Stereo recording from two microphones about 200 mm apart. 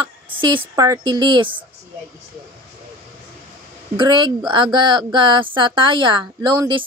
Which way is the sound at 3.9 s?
25° right (ahead or behind).